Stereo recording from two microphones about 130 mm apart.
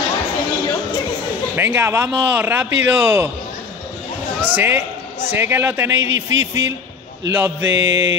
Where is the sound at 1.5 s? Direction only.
15° right (ahead or behind).